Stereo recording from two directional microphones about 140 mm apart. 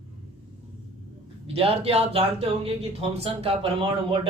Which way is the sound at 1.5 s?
45° right (ahead or behind).